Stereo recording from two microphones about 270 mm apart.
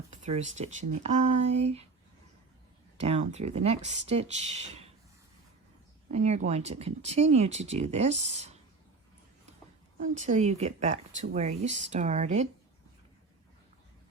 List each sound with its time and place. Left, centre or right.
0.1 s speech: right
3.0 s speech: right
6.1 s speech: right
10.0 s speech: right